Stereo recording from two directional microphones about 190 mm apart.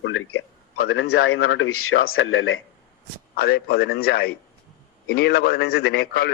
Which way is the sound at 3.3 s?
55° left (ahead or behind).